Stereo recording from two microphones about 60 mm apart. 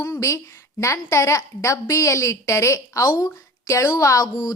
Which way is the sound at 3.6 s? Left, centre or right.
Left.